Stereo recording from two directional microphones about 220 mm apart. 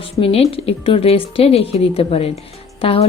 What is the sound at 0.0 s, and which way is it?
A woman's voice, 25° left (ahead or behind).